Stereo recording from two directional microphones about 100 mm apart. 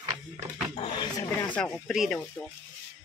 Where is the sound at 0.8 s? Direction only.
60° left (ahead or behind).